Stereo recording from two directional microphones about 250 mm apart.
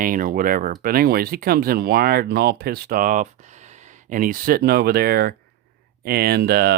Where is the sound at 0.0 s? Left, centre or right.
Right.